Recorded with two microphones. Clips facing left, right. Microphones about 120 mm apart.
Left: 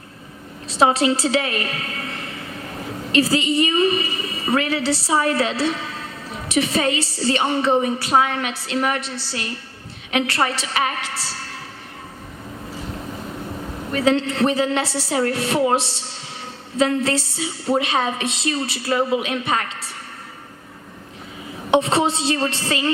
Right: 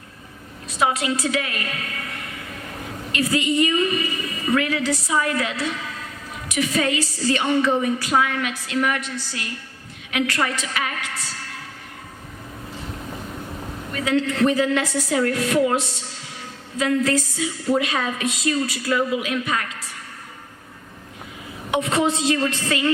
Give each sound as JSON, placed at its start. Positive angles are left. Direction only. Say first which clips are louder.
{"t": 0.7, "sound": "a woman's voice", "louder": "left 5 dB", "side_deg": 30}
{"t": 13.9, "sound": "a woman's voice", "louder": "left 3 dB", "side_deg": 25}
{"t": 21.7, "sound": "a woman's voice", "louder": "left 3 dB", "side_deg": 30}